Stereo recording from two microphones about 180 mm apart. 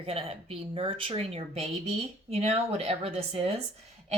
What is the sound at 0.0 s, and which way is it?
Speech, 30° right (ahead or behind).